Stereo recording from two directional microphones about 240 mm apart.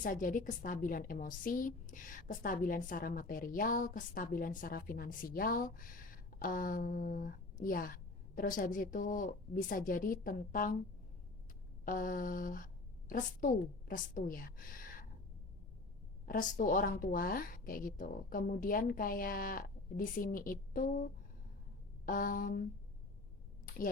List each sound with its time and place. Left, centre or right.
0.0 s a woman's voice: left
11.9 s a woman's voice: left
16.2 s a woman's voice: left
22.0 s a woman's voice: left
23.6 s a sound: left